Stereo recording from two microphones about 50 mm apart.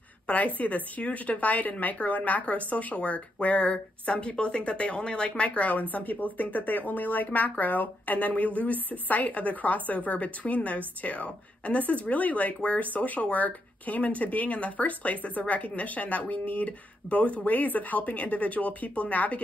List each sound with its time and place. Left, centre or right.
0.3 s a woman's voice: left